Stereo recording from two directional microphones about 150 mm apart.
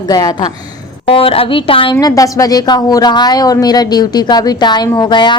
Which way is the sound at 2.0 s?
25° left (ahead or behind).